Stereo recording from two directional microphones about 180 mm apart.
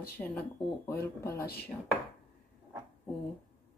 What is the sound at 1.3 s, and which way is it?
Speech, 60° left (ahead or behind).